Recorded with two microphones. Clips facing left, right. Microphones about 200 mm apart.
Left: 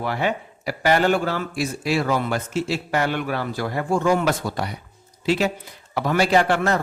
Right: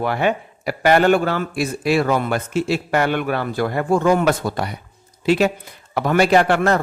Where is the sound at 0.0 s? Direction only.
60° right (ahead or behind).